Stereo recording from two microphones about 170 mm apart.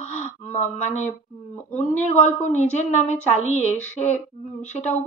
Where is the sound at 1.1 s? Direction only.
10° left (ahead or behind).